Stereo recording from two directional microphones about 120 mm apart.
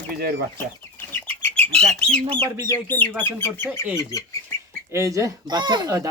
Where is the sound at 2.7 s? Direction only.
15° left (ahead or behind).